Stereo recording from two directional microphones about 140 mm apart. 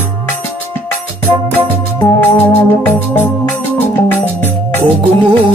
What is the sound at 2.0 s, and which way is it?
Organ, 15° left (ahead or behind).